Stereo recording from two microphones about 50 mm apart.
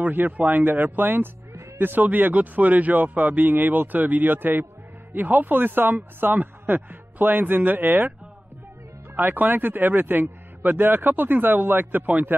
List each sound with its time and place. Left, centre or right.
0.0 s speech: right
9.1 s speech: right